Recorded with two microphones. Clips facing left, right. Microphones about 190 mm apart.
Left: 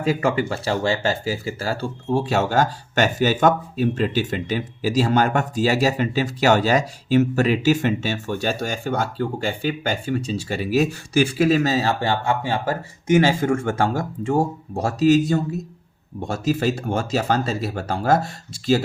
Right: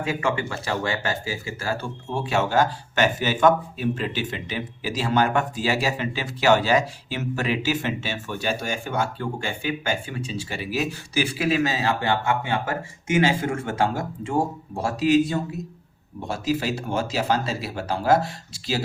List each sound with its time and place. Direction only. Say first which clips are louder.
0.0 s speech: left 5 dB; 35° left (ahead or behind)